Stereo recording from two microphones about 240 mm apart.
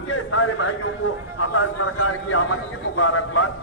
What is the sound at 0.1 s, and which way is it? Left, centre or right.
A man's voice, left.